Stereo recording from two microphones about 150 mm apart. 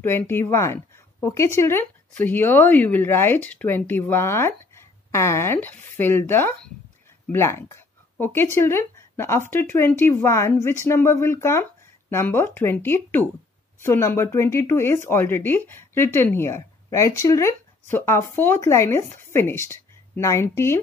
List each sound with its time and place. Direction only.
0.0 s speech: 15° left (ahead or behind)